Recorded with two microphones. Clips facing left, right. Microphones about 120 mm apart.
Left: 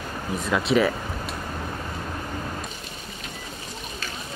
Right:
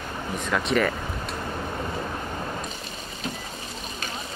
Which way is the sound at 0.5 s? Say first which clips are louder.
Left 3 dB; 5° left (ahead or behind).